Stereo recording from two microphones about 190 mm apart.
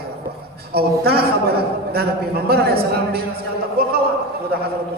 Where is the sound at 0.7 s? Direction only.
55° right (ahead or behind).